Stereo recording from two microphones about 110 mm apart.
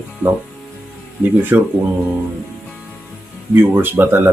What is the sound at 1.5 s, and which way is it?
Speech, 20° right (ahead or behind).